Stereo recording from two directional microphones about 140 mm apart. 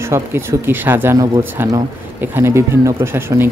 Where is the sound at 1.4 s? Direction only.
15° right (ahead or behind).